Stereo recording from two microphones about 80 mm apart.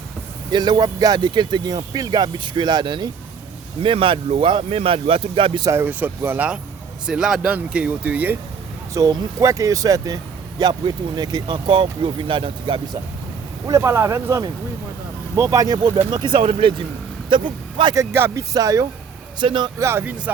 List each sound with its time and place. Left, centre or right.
0.5 s speech: right
3.8 s speech: right
5.7 s speech: right
7.1 s speech: centre
8.9 s speech: right
10.6 s speech: right
13.7 s speech: right
16.0 s speech: right
17.2 s speech: right
17.9 s speech: right
18.3 s speech: right
19.4 s speech: right
19.8 s speech: right